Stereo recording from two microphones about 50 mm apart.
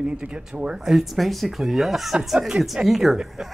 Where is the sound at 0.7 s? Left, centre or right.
Centre.